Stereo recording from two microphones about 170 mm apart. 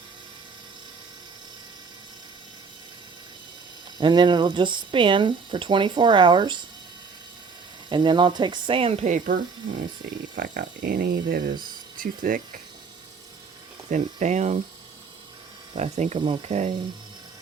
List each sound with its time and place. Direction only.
3.9 s speech: 25° right (ahead or behind)
7.9 s speech: 25° right (ahead or behind); by 9.3 s 50° right (ahead or behind)
10.3 s speech: 60° right (ahead or behind)
13.9 s speech: 45° right (ahead or behind)
15.7 s speech: 40° right (ahead or behind)